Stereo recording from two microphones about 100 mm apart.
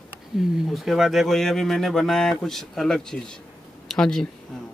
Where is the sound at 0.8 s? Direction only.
Centre (ahead or behind).